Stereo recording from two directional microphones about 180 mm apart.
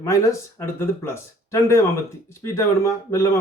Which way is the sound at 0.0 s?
15° left (ahead or behind).